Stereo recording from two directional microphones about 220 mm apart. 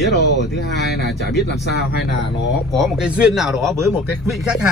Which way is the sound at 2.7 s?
Centre (ahead or behind).